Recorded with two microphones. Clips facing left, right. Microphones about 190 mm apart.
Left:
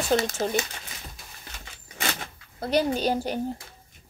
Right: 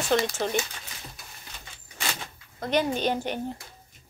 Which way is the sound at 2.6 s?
35° left (ahead or behind).